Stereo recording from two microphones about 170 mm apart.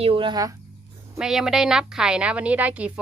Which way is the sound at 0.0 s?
30° right (ahead or behind).